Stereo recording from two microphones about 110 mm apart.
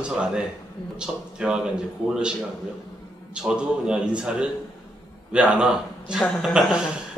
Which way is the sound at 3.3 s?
10° right (ahead or behind).